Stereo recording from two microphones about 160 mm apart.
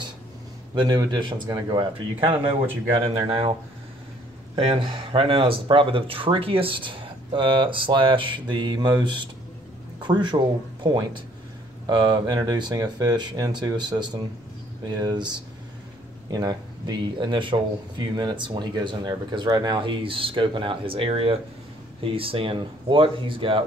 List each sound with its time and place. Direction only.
0.7 s speech: 25° right (ahead or behind)
4.6 s speech: 35° right (ahead or behind)